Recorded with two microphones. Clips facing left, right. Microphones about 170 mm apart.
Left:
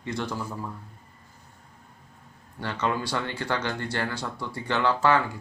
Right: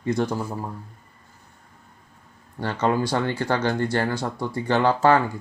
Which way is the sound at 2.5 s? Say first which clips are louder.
Right 6 dB; 40° right (ahead or behind).